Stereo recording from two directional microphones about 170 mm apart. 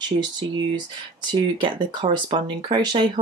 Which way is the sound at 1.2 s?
25° right (ahead or behind).